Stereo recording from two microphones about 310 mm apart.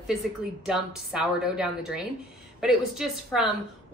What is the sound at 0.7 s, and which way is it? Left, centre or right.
Speech, centre.